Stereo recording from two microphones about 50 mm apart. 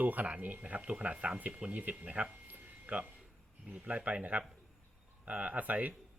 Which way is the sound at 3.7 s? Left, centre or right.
Right.